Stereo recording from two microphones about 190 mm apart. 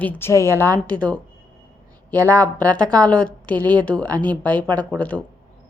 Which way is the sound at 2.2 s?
10° left (ahead or behind).